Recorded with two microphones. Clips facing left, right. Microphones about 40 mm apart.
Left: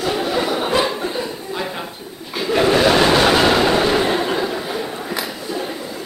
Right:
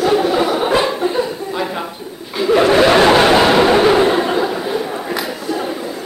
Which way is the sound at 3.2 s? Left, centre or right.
Centre.